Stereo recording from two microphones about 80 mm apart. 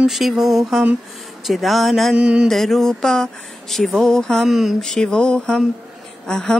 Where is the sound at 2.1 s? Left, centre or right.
Centre.